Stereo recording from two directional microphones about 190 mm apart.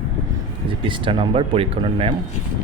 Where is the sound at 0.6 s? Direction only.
25° right (ahead or behind).